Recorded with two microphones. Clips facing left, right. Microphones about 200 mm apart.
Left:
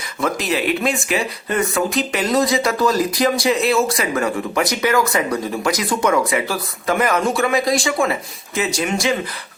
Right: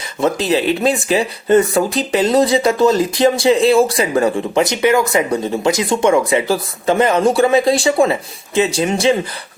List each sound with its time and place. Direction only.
0.2 s speech: 30° right (ahead or behind)